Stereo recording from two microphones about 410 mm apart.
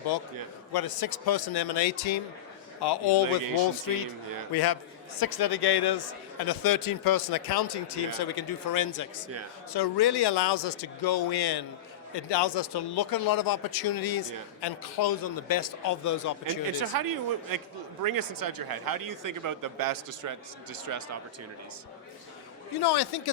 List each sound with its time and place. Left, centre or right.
0.7 s speech: left
2.8 s speech: left
4.5 s speech: left
9.7 s speech: left
12.1 s speech: left
16.9 s speech: right
22.8 s speech: left